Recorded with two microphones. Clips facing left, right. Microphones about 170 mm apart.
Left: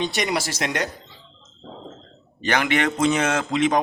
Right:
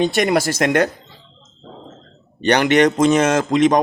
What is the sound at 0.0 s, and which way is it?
Speech, 55° right (ahead or behind).